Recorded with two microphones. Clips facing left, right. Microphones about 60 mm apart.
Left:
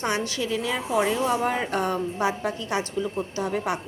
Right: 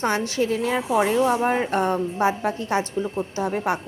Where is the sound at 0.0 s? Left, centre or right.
Right.